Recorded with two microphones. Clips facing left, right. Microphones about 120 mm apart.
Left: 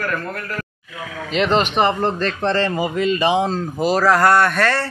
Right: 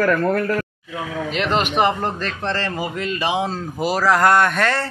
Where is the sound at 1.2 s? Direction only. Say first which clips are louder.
Left 4 dB; 5° right (ahead or behind).